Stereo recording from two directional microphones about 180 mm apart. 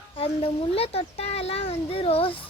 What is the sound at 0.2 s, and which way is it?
A child's voice, 35° left (ahead or behind).